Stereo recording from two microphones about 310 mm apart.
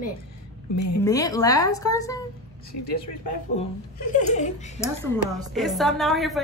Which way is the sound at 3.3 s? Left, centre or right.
Left.